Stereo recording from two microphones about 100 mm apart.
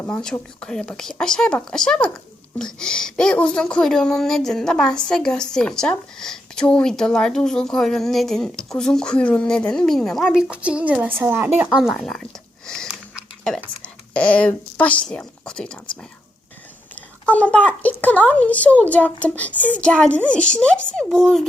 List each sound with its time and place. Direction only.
0.1 s speech: 10° left (ahead or behind); by 11.1 s 10° right (ahead or behind)
11.2 s a woman's voice: 20° right (ahead or behind)
11.7 s speech: 5° right (ahead or behind)
12.6 s sniff: 5° left (ahead or behind)
13.8 s speech: 10° left (ahead or behind)
16.9 s speech: 15° left (ahead or behind)